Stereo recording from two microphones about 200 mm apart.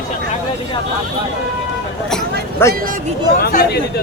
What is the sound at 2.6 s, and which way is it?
Speech, 10° left (ahead or behind).